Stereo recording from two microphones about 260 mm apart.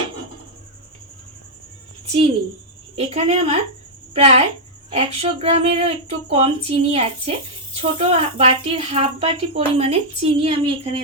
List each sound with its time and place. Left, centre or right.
2.9 s speech: right